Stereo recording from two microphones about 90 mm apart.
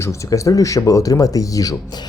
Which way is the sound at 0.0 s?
35° left (ahead or behind).